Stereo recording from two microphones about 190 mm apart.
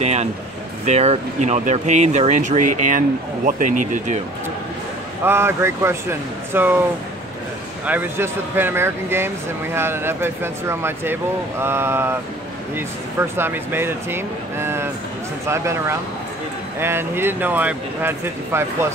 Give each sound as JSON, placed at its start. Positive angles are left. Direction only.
{"t": 0.0, "sound": "a sound", "side_deg": -35}
{"t": 0.8, "sound": "speech", "side_deg": -35}
{"t": 5.2, "sound": "speech", "side_deg": -15}
{"t": 7.8, "sound": "speech", "side_deg": -10}